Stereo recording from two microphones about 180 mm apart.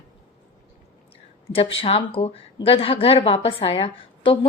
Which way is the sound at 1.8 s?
30° left (ahead or behind).